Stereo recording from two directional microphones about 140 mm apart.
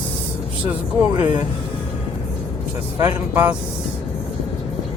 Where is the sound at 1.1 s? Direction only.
30° right (ahead or behind).